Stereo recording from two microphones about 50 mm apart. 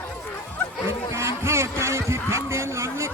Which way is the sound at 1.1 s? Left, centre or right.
Right.